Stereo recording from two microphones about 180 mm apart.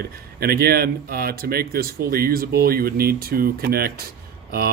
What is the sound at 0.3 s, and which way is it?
Speech, 60° right (ahead or behind).